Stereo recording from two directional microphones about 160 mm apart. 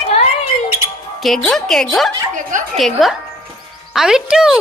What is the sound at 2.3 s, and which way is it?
Speech, 55° right (ahead or behind).